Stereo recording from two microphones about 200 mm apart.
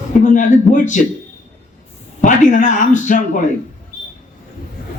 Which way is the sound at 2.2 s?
40° left (ahead or behind).